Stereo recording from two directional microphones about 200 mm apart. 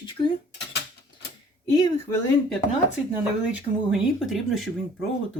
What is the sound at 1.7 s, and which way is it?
Speech, 15° left (ahead or behind).